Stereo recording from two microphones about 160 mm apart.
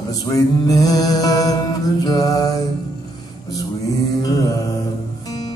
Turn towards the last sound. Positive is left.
turn(degrees=25)  # may be behind; listen again after turning